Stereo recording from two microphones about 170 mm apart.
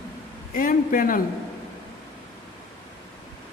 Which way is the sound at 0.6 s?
55° left (ahead or behind).